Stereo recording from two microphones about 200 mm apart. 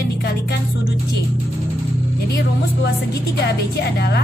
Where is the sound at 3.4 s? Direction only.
55° left (ahead or behind).